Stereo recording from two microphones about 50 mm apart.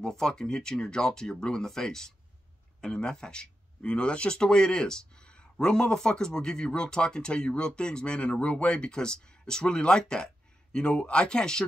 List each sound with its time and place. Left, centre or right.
0.0 s speech: centre